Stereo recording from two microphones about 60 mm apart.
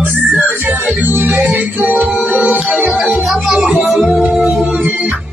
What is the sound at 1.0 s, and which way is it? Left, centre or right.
Music, right.